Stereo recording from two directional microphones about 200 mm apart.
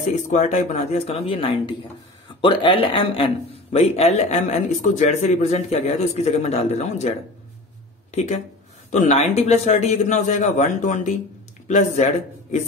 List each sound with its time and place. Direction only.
0.1 s a man's voice: 35° left (ahead or behind)
8.1 s a man's voice: 35° left (ahead or behind)